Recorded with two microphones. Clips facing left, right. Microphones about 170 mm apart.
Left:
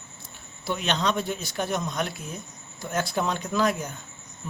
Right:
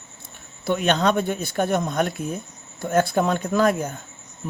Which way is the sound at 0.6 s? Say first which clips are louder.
Right 7 dB; 55° right (ahead or behind).